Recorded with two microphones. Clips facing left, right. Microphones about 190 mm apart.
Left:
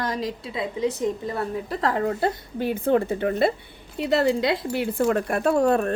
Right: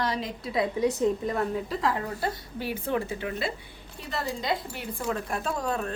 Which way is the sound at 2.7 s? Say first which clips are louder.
Left 8 dB; 55° left (ahead or behind).